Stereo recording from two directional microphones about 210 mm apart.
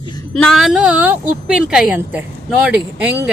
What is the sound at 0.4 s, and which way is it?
A woman's voice, centre (ahead or behind).